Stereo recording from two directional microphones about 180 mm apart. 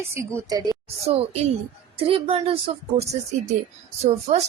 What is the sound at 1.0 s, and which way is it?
A woman's voice, 35° right (ahead or behind).